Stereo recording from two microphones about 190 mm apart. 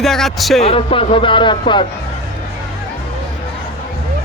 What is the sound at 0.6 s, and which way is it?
Speech, 30° left (ahead or behind).